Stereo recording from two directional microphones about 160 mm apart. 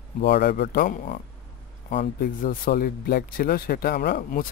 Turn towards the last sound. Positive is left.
turn(degrees=60)  # may be behind; listen again after turning